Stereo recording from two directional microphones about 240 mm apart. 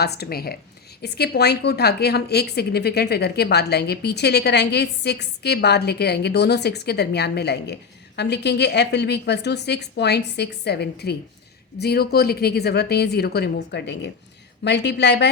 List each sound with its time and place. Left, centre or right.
0.0 s a woman's voice: left